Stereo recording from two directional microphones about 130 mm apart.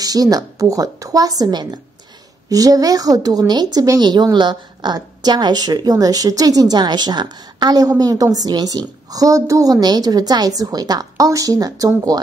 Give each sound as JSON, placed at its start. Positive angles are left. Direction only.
{"t": 0.0, "sound": "a woman's voice", "side_deg": -30}